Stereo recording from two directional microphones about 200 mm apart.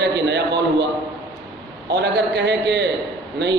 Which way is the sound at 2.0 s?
60° right (ahead or behind).